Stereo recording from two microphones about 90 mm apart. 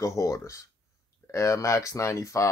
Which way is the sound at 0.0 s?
35° left (ahead or behind).